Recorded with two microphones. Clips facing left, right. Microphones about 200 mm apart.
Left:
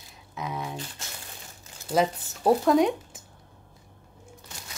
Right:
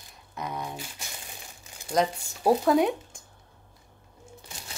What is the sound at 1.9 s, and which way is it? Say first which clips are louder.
Speech: left 1 dB; centre (ahead or behind).